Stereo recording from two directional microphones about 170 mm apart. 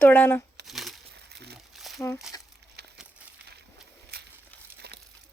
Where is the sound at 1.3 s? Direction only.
70° right (ahead or behind).